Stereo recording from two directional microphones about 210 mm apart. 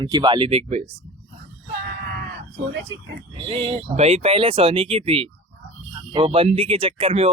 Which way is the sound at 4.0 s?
30° right (ahead or behind).